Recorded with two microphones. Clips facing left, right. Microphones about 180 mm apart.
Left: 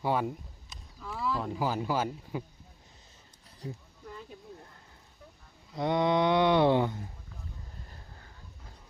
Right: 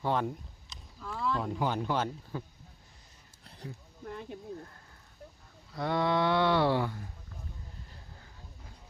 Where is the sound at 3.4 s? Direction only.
65° right (ahead or behind).